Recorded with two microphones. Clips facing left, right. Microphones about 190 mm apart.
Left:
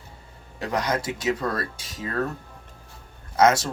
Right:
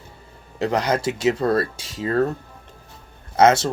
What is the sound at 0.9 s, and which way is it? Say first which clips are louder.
Speech: right 5 dB; 30° right (ahead or behind).